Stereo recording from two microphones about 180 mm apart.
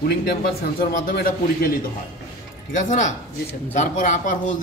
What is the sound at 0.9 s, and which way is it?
Speech, 50° left (ahead or behind).